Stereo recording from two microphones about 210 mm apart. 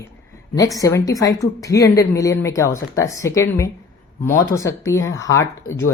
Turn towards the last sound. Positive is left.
turn(degrees=10)  # may be behind; listen again after turning